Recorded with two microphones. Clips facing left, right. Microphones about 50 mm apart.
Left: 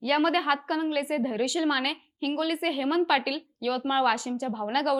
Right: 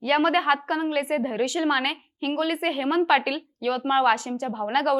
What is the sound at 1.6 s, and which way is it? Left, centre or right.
A woman's voice, right.